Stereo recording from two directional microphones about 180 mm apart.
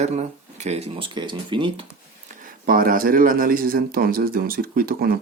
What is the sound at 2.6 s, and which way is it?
Speech, 55° right (ahead or behind).